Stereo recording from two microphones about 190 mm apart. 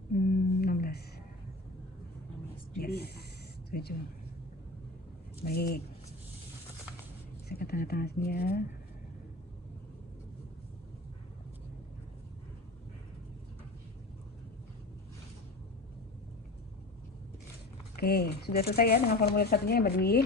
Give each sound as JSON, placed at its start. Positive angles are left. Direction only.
{"t": 0.1, "sound": "a sound", "side_deg": 55}
{"t": 2.7, "sound": "a woman's voice", "side_deg": 55}
{"t": 5.4, "sound": "speech", "side_deg": 55}
{"t": 7.4, "sound": "speech", "side_deg": 55}
{"t": 17.9, "sound": "speech", "side_deg": 55}